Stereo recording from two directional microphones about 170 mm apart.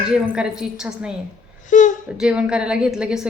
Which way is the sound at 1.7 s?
45° left (ahead or behind).